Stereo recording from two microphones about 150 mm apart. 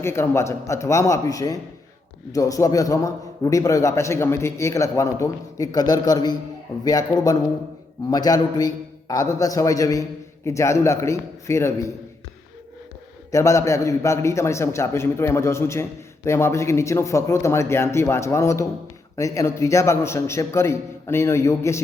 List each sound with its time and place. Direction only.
0.0 s a man's voice: 15° left (ahead or behind)
13.3 s a man's voice: 20° left (ahead or behind)